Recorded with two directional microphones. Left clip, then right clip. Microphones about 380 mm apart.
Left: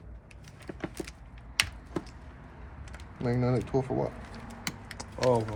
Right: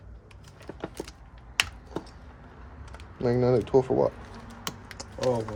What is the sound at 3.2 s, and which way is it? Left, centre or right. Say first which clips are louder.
Speech: right 7 dB; right.